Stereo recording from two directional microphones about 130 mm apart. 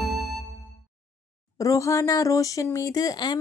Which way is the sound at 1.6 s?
25° left (ahead or behind).